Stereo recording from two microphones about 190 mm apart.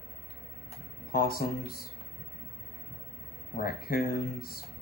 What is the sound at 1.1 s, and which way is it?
Speech, 50° left (ahead or behind).